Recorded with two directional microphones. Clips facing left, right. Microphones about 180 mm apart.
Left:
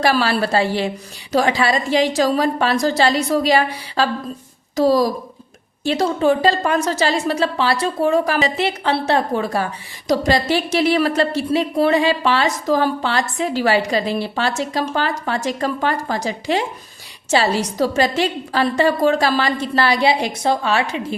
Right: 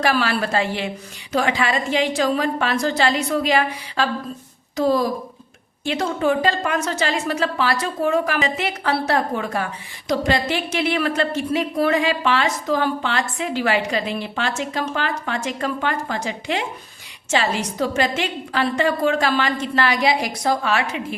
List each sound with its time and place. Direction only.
0.0 s a woman's voice: 35° left (ahead or behind)